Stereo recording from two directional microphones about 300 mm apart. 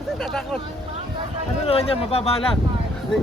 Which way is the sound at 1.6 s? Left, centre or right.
Centre.